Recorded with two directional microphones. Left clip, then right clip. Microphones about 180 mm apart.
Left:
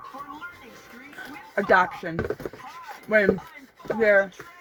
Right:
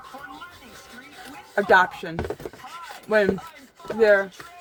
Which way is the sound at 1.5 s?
25° right (ahead or behind).